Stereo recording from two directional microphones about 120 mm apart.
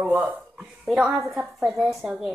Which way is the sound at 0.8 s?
Centre (ahead or behind).